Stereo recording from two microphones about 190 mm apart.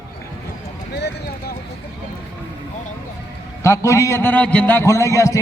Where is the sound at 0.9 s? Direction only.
60° left (ahead or behind).